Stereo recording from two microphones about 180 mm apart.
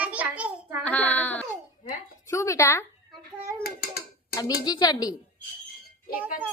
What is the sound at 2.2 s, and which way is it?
Speech, 15° left (ahead or behind).